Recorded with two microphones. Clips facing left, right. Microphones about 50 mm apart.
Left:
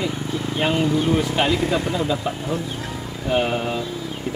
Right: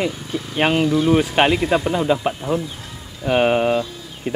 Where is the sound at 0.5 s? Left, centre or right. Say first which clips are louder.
Right 3 dB; right.